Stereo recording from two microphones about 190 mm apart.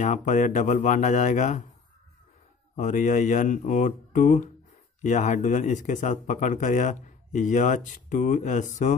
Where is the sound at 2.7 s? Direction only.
40° left (ahead or behind).